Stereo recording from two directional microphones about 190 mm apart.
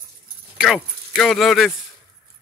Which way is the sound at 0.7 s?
Centre (ahead or behind).